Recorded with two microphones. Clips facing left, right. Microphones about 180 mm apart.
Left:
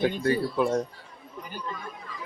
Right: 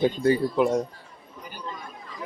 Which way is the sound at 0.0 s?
25° right (ahead or behind).